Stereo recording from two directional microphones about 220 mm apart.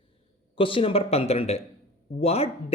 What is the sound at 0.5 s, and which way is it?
A man's voice, 25° left (ahead or behind).